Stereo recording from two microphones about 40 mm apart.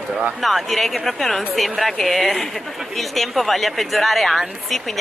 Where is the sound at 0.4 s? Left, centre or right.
Centre.